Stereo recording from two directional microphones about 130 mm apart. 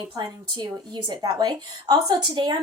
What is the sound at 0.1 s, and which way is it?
A woman's voice, 30° right (ahead or behind).